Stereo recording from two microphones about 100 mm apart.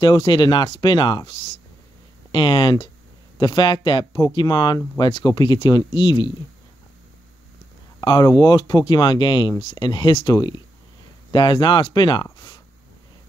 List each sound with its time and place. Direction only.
0.0 s speech: 50° left (ahead or behind)
2.3 s speech: 55° left (ahead or behind)
8.0 s speech: 45° left (ahead or behind)